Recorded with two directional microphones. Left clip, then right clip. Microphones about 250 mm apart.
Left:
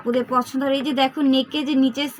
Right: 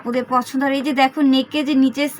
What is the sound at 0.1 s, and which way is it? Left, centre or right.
Speech, right.